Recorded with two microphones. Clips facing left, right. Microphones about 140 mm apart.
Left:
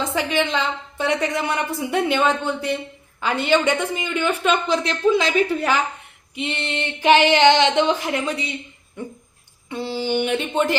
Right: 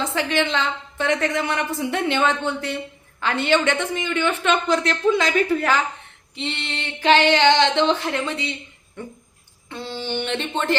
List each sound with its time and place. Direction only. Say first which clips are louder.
0.1 s a woman's voice: left 1 dB; 15° left (ahead or behind)
9.6 s speech: left 5 dB; 15° left (ahead or behind)